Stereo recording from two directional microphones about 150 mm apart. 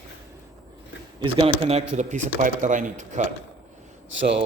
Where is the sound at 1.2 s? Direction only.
40° right (ahead or behind); by 3.2 s 55° right (ahead or behind).